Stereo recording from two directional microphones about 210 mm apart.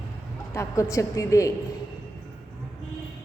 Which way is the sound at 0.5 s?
15° left (ahead or behind).